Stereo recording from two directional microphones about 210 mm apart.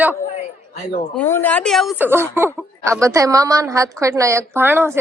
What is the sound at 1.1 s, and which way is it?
A woman's voice, 10° left (ahead or behind).